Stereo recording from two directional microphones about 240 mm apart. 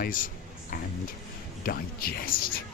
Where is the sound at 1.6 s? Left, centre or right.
Left.